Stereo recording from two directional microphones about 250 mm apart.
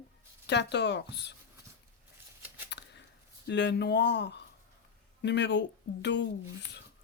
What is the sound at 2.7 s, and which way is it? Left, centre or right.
Shuffling cards, left.